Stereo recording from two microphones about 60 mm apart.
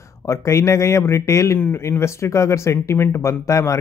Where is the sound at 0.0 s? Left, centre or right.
Left.